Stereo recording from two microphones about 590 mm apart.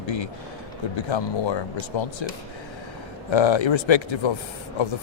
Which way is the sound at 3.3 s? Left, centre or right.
Left.